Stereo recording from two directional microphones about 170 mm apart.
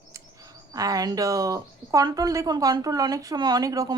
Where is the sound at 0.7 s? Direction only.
20° right (ahead or behind).